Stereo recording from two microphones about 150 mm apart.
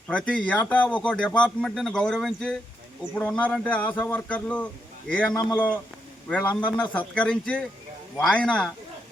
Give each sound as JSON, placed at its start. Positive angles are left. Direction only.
{"t": 0.1, "sound": "a man's voice", "side_deg": 5}
{"t": 5.3, "sound": "speech", "side_deg": 30}
{"t": 5.5, "sound": "a man's voice", "side_deg": 10}